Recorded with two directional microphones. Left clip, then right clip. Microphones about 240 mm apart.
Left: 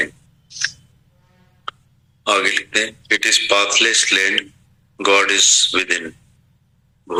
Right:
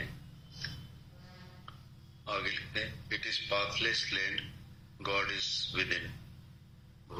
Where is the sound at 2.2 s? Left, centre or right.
Left.